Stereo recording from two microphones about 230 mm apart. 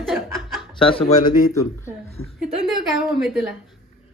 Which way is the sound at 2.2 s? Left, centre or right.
Left.